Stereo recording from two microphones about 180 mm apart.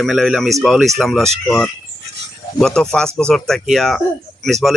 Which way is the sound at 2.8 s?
5° left (ahead or behind).